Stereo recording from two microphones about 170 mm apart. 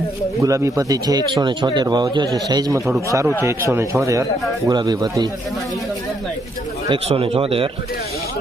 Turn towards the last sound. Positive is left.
turn(degrees=-35)  # may be behind; listen again after turning